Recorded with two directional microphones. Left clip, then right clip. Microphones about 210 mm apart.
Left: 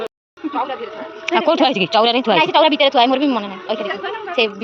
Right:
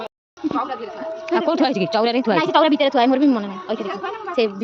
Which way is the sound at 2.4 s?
60° right (ahead or behind).